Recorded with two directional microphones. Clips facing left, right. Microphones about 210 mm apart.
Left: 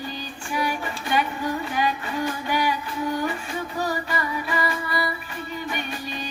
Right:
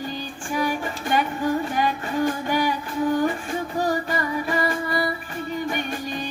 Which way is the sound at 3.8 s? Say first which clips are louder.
Right 3 dB; 45° right (ahead or behind).